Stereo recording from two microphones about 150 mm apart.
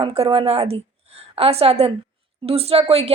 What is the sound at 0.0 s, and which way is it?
A woman's voice, 40° right (ahead or behind).